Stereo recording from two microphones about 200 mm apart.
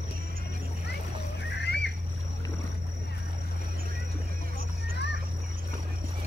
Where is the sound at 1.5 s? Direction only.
55° left (ahead or behind).